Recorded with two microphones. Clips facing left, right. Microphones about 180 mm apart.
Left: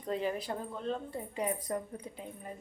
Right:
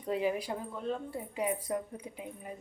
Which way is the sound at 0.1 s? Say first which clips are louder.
Right 2 dB; 10° right (ahead or behind).